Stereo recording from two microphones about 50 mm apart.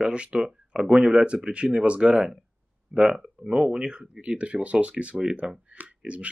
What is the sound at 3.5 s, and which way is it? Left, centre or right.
Speech, centre.